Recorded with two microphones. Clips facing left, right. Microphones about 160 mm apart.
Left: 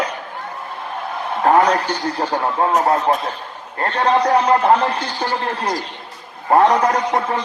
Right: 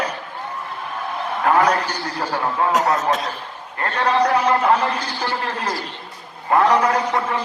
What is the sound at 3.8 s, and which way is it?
A man's voice, 30° left (ahead or behind).